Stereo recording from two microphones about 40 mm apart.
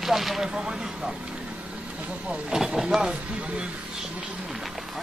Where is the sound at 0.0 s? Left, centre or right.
Centre.